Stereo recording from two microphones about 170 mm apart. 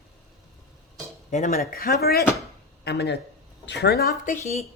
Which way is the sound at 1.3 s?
50° left (ahead or behind).